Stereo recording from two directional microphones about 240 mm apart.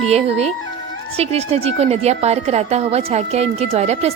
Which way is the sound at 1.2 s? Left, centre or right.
Right.